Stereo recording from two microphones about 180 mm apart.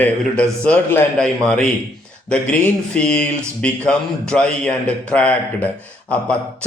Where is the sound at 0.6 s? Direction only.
5° left (ahead or behind).